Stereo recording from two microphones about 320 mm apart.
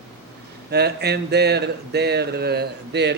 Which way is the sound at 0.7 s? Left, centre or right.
Right.